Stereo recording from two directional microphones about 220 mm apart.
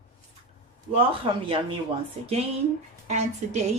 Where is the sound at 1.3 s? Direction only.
25° right (ahead or behind).